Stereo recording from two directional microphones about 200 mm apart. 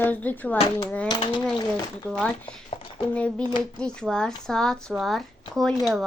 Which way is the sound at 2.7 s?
30° left (ahead or behind).